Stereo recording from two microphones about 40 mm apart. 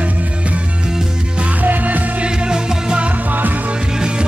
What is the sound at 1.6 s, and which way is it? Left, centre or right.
Music, right.